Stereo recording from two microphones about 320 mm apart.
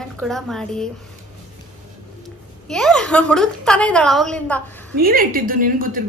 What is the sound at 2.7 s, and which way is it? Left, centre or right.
A woman's voice, centre.